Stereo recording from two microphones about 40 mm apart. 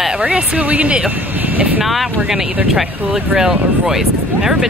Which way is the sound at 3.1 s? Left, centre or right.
Centre.